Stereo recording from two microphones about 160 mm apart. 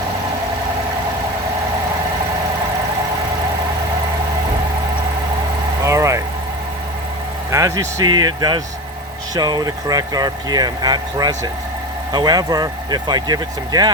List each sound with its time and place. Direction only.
5.8 s vehicle: 20° right (ahead or behind)
7.5 s speech: 20° right (ahead or behind)